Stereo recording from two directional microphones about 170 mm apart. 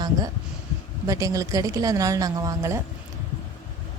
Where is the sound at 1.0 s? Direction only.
20° right (ahead or behind).